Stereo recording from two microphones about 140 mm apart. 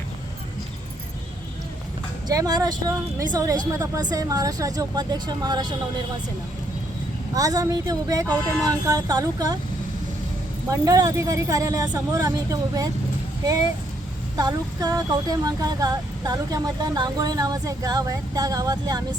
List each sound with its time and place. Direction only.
2.2 s speech: 25° right (ahead or behind)
7.3 s speech: 25° right (ahead or behind)
10.7 s speech: 25° right (ahead or behind)
14.3 s speech: 30° right (ahead or behind)